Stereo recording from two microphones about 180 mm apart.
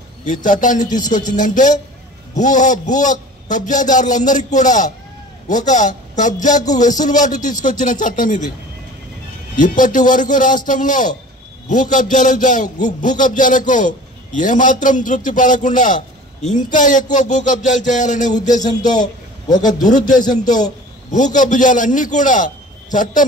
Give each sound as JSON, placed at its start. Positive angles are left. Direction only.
{"t": 0.2, "sound": "a man's voice", "side_deg": 45}
{"t": 9.6, "sound": "a man's voice", "side_deg": 45}
{"t": 19.6, "sound": "a man's voice", "side_deg": 45}
{"t": 20.1, "sound": "a man's voice", "side_deg": 20}
{"t": 21.1, "sound": "a man's voice", "side_deg": 45}